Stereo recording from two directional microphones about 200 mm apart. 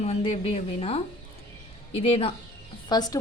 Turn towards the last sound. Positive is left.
turn(degrees=20)  # may be behind; listen again after turning